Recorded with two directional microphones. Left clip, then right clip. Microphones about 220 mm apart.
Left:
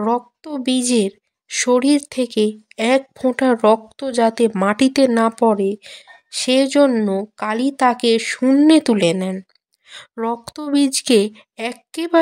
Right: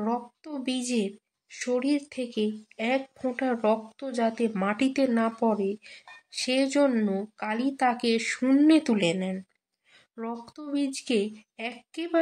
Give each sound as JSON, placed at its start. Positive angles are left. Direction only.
{"t": 0.0, "sound": "a woman's voice", "side_deg": 45}